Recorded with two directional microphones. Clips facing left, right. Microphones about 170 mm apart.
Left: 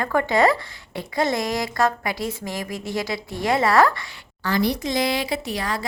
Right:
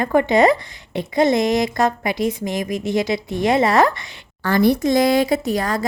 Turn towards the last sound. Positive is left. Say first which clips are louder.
# right 6 dB
turn(degrees=-45)  # may be behind; listen again after turning